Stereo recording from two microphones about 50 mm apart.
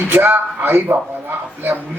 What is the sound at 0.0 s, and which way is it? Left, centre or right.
Speech, right.